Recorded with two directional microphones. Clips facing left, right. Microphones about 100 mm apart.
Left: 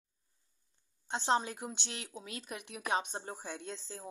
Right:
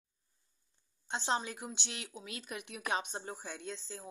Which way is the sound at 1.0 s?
45° left (ahead or behind).